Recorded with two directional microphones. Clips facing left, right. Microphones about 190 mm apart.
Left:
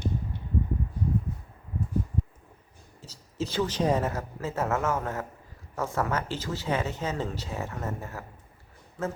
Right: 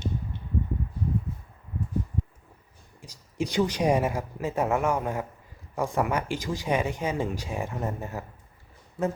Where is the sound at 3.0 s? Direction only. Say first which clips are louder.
Right 2 dB; 15° right (ahead or behind).